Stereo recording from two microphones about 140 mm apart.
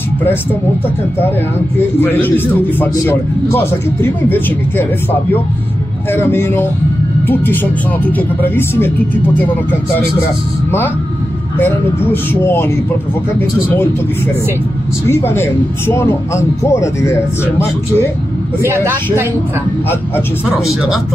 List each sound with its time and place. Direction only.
1.8 s a man's voice: 15° left (ahead or behind)
6.1 s a man's voice: 15° left (ahead or behind)
8.2 s a man's voice: 15° left (ahead or behind)
11.5 s a man's voice: 15° left (ahead or behind)
15.0 s a man's voice: 15° left (ahead or behind)
18.6 s speech: 15° right (ahead or behind)
20.4 s speech: 5° right (ahead or behind)